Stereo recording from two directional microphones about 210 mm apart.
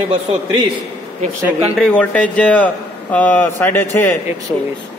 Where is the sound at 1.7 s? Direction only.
5° left (ahead or behind).